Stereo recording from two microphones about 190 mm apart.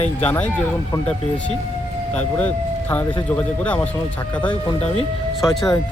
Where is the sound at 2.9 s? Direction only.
10° left (ahead or behind).